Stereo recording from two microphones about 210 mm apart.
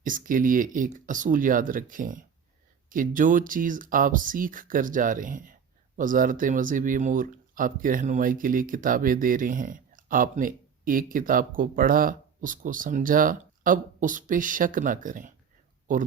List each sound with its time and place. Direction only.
0.0 s speech: 40° right (ahead or behind)